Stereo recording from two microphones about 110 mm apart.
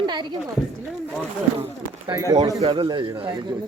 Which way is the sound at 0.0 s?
45° right (ahead or behind).